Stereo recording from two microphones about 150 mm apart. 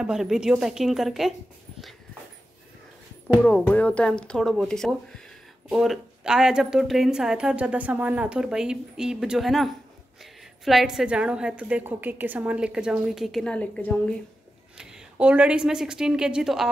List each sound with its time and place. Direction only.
0.0 s a woman's voice: 5° right (ahead or behind)
3.4 s a woman's voice: 10° left (ahead or behind)
14.8 s a woman's voice: 5° right (ahead or behind)